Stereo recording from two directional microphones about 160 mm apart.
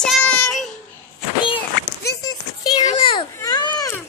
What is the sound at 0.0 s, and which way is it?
Child singing, 5° left (ahead or behind).